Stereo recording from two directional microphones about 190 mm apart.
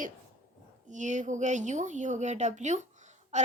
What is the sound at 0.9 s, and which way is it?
Speech, 40° right (ahead or behind).